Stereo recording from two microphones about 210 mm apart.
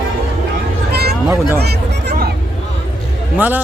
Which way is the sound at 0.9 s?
50° right (ahead or behind).